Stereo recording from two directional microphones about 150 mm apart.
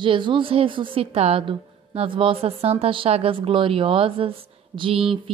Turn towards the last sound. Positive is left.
turn(degrees=-35)  # may be behind; listen again after turning